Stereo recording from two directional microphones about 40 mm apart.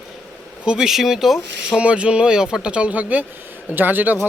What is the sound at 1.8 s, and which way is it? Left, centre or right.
Speech, right.